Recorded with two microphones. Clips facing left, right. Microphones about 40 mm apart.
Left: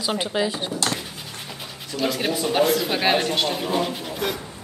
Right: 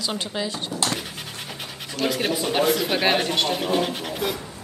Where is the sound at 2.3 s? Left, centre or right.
Centre.